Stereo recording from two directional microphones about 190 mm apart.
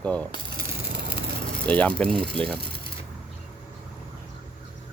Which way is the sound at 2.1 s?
25° right (ahead or behind).